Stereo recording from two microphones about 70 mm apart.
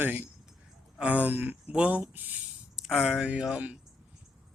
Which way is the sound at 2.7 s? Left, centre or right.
Centre.